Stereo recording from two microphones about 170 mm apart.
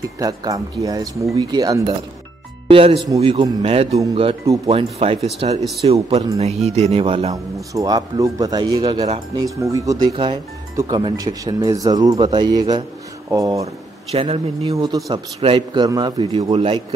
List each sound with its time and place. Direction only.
0.2 s speech: 20° right (ahead or behind)
2.7 s speech: 35° right (ahead or behind)
7.7 s speech: 20° right (ahead or behind)
14.1 s speech: 35° right (ahead or behind)
14.7 s speech: 20° right (ahead or behind)